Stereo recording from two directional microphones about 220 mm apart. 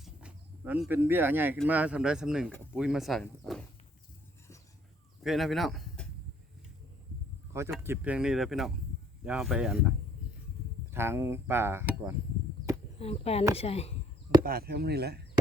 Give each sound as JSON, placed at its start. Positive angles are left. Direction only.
{"t": 0.0, "sound": "a sound", "side_deg": -5}
{"t": 1.6, "sound": "speech", "side_deg": -5}
{"t": 5.2, "sound": "speech", "side_deg": 0}
{"t": 7.5, "sound": "speech", "side_deg": -10}
{"t": 10.9, "sound": "speech", "side_deg": -10}
{"t": 13.0, "sound": "speech", "side_deg": 25}
{"t": 14.4, "sound": "speech", "side_deg": -45}